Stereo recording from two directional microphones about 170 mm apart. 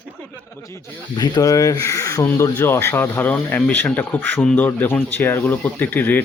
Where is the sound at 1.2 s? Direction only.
20° left (ahead or behind).